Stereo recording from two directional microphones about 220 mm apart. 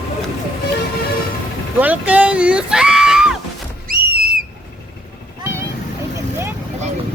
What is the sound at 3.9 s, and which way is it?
Whistle, 45° right (ahead or behind).